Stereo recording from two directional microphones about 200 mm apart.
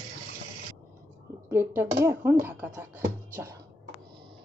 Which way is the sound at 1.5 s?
10° right (ahead or behind).